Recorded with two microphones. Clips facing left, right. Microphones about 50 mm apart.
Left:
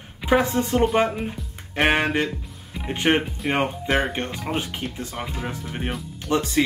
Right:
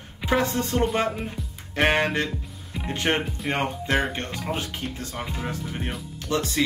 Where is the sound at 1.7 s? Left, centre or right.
Centre.